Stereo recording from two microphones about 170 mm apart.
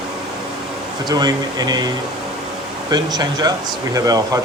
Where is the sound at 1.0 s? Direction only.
25° right (ahead or behind).